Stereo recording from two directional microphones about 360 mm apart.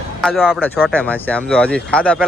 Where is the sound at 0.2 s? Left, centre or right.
Centre.